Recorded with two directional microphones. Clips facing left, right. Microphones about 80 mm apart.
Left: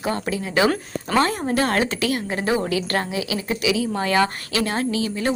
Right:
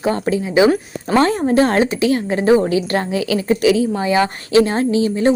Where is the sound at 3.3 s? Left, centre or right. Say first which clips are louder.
Right 9 dB; right.